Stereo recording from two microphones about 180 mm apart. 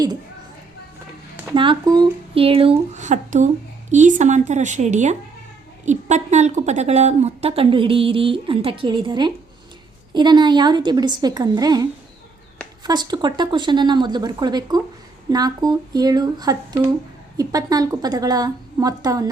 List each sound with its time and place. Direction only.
1.5 s a woman's voice: 25° right (ahead or behind)